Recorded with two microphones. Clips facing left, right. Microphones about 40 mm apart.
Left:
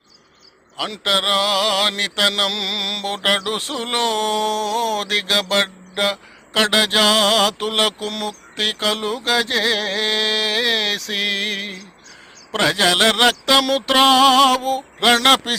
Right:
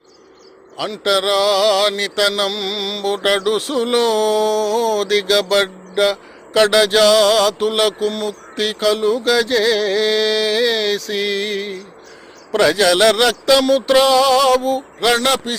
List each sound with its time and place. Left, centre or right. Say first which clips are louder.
1.0 s music: right 3 dB; left
2.5 s mantra: right 1 dB; left
3.2 s music: right 2 dB; centre
3.8 s mantra: right 4 dB; left
5.6 s speech: right 5 dB; centre
6.6 s mantra: right 4 dB; left
8.1 s mantra: right 3 dB; left
8.5 s mantra: right 4 dB; left
12.6 s music: right 3 dB; left
13.4 s a sound: right 3 dB; left
13.9 s mantra: left 1 dB; left